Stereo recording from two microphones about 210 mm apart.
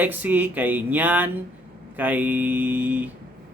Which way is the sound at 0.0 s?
10° right (ahead or behind).